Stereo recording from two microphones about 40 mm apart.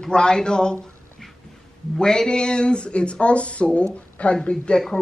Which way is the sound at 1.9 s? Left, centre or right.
Centre.